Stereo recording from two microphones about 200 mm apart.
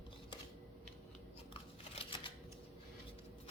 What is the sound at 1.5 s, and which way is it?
Shuffling cards, 25° left (ahead or behind).